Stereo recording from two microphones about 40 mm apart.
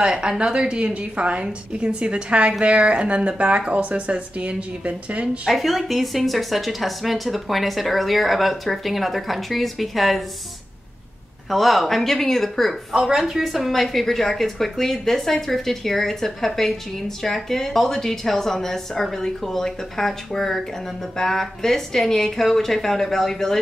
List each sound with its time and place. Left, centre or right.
0.0 s a woman's voice: centre
5.2 s a woman's voice: right
5.5 s speech: centre
11.5 s speech: centre
12.9 s speech: centre